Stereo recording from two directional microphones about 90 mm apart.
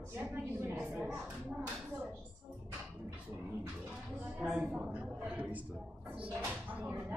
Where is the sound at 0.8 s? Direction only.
5° right (ahead or behind).